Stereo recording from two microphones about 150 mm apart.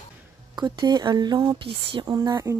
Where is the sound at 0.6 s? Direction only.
30° right (ahead or behind).